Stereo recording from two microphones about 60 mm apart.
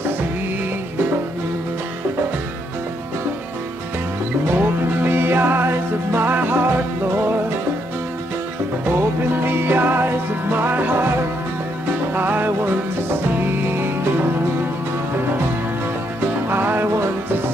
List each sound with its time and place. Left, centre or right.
4.6 s music: right
9.3 s music: right
12.1 s music: right
16.4 s music: right